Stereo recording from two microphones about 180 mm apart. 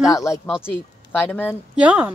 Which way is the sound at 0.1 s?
15° left (ahead or behind).